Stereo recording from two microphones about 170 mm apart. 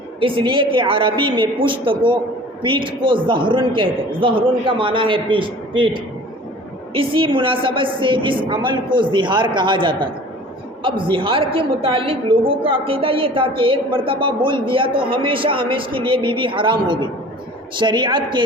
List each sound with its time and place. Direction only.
0.2 s a woman's voice: 30° right (ahead or behind)